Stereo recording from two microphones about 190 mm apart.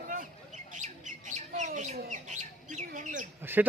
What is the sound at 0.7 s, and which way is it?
Bird, 40° right (ahead or behind).